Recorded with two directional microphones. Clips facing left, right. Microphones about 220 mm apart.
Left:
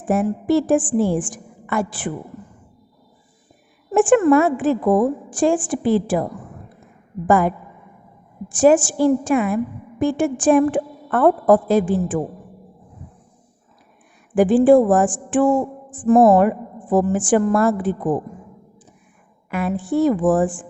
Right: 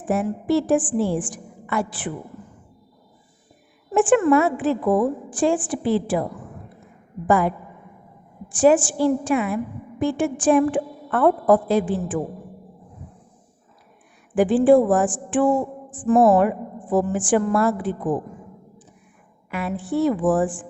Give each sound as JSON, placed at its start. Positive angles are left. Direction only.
{"t": 0.1, "sound": "a woman's voice", "side_deg": 50}
{"t": 3.9, "sound": "a woman's voice", "side_deg": 45}
{"t": 7.3, "sound": "a woman's voice", "side_deg": 45}
{"t": 14.3, "sound": "a woman's voice", "side_deg": 45}
{"t": 19.5, "sound": "a woman's voice", "side_deg": 45}